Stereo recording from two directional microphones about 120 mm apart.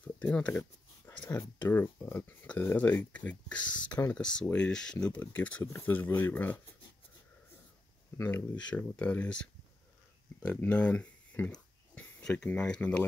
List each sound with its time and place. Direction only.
0.0 s speech: 10° left (ahead or behind)
1.0 s a sound: 15° left (ahead or behind)
1.6 s speech: 20° left (ahead or behind)
8.2 s speech: 20° left (ahead or behind)